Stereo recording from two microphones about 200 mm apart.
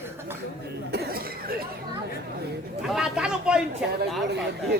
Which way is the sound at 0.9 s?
50° right (ahead or behind).